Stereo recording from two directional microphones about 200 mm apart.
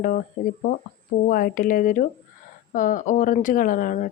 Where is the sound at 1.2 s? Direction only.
45° left (ahead or behind).